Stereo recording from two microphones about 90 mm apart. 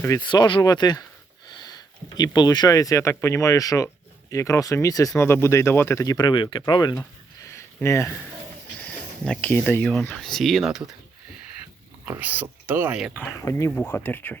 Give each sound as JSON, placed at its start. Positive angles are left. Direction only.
{"t": 0.2, "sound": "speech", "side_deg": 60}
{"t": 0.6, "sound": "speech", "side_deg": 50}
{"t": 5.1, "sound": "speech", "side_deg": 25}
{"t": 6.1, "sound": "speech", "side_deg": 60}
{"t": 7.4, "sound": "a sound", "side_deg": 30}
{"t": 8.8, "sound": "a sound", "side_deg": 10}
{"t": 9.5, "sound": "speech", "side_deg": 25}
{"t": 10.2, "sound": "speech", "side_deg": 5}
{"t": 12.2, "sound": "speech", "side_deg": -20}
{"t": 13.4, "sound": "speech", "side_deg": 30}